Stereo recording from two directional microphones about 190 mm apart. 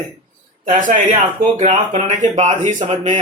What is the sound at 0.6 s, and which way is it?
Speech, 45° right (ahead or behind).